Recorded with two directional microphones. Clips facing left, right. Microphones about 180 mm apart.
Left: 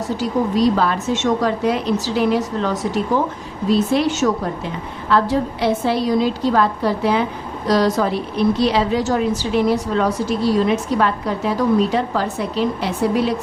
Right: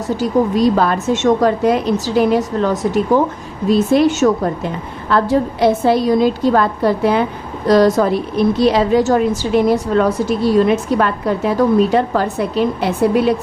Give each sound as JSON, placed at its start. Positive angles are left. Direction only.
{"t": 0.2, "sound": "a woman's voice", "side_deg": -45}